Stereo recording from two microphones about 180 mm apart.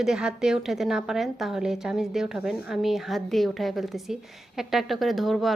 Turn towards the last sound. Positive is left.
turn(degrees=0)  # may be behind; listen again after turning